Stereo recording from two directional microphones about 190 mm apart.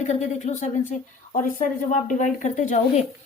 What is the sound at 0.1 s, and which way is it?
A woman's voice, 40° left (ahead or behind).